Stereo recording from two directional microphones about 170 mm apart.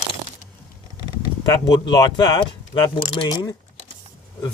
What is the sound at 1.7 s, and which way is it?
Speech, 25° left (ahead or behind).